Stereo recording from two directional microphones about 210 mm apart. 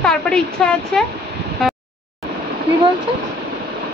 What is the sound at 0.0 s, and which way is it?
A woman's voice, 5° left (ahead or behind).